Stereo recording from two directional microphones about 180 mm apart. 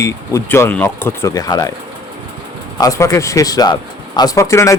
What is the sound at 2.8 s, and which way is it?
Speech, 20° left (ahead or behind).